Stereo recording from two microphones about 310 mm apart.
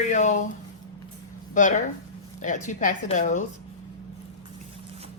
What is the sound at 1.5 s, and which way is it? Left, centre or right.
A woman's voice, left.